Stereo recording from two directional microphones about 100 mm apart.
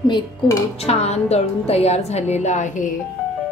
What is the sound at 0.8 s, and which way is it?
A woman's voice, 90° left.